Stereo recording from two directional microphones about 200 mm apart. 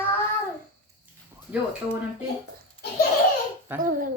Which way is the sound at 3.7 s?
10° right (ahead or behind).